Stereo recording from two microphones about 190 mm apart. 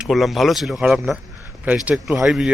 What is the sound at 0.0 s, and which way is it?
Speech, centre (ahead or behind).